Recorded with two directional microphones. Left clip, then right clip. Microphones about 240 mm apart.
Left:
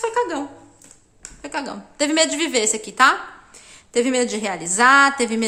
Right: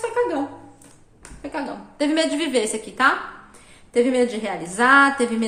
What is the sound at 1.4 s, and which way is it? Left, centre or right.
A woman's voice, left.